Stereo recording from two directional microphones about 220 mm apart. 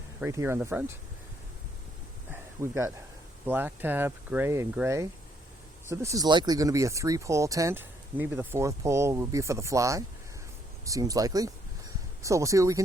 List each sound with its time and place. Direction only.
0.2 s speech: 10° right (ahead or behind)
2.3 s a sound: 10° right (ahead or behind)
3.4 s speech: 10° right (ahead or behind)